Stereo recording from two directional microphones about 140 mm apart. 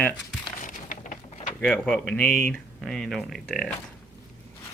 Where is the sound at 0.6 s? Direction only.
70° left (ahead or behind).